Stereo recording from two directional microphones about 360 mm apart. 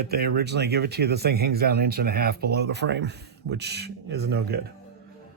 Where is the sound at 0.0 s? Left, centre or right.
Right.